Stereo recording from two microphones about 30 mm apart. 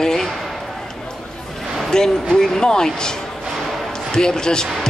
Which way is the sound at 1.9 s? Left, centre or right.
Left.